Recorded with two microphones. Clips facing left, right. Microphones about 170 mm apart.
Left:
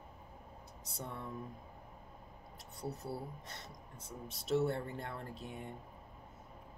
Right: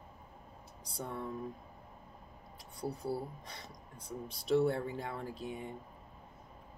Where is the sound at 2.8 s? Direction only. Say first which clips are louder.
Right 4 dB; 25° left (ahead or behind).